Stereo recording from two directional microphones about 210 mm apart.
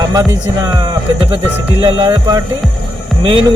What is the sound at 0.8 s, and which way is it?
Speech, 20° right (ahead or behind).